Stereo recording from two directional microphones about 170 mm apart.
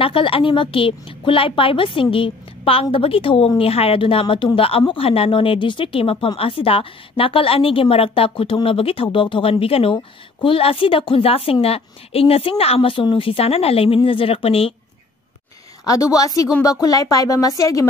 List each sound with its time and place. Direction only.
0.0 s speech: 30° left (ahead or behind)
15.8 s speech: 20° left (ahead or behind)